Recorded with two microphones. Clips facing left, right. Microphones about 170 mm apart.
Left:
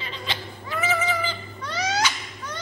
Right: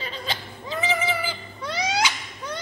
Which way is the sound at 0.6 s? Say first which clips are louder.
Even; 15° right (ahead or behind).